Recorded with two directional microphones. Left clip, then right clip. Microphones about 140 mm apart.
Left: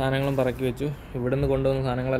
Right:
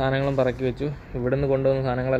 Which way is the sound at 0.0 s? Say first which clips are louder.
Right 2 dB; 15° left (ahead or behind).